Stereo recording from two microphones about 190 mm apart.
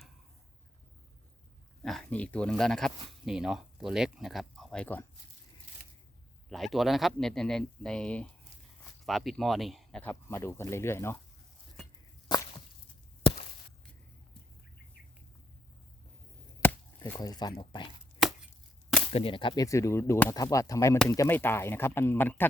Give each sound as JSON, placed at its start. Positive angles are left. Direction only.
{"t": 1.8, "sound": "speech", "side_deg": 0}
{"t": 6.5, "sound": "speech", "side_deg": 0}
{"t": 10.1, "sound": "speech", "side_deg": 15}
{"t": 16.6, "sound": "chop", "side_deg": 10}
{"t": 17.1, "sound": "speech", "side_deg": 20}
{"t": 18.2, "sound": "chopping", "side_deg": 0}
{"t": 19.1, "sound": "speech", "side_deg": 25}